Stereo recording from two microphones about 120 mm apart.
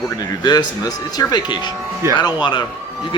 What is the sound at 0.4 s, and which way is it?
Speech, 35° left (ahead or behind).